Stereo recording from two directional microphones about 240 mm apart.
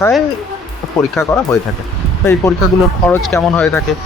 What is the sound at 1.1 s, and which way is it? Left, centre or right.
Speech, centre.